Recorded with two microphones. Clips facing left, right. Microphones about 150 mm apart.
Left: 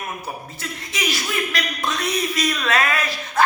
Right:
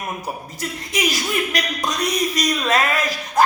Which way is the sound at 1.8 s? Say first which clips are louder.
Right 1 dB; 40° right (ahead or behind).